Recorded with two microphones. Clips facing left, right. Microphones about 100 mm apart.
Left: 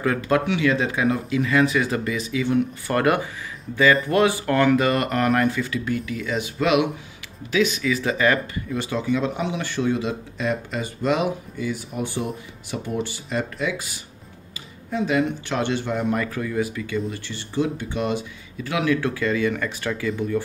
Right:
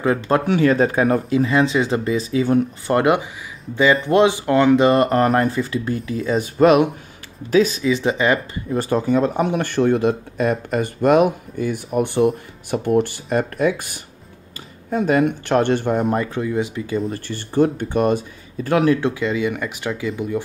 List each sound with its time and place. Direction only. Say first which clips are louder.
0.0 s speech: right 3 dB; 25° right (ahead or behind)
0.5 s speech: right 5 dB; 40° right (ahead or behind)
2.9 s speech: right 4 dB; 20° right (ahead or behind); by 7.8 s 35° right (ahead or behind)
7.8 s speech: right 3 dB; 25° right (ahead or behind)
8.7 s speech: right 6 dB; 45° right (ahead or behind)
18.9 s speech: right 2 dB; 20° right (ahead or behind)